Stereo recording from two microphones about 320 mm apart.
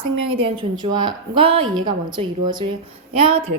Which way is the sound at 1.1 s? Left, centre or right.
Centre.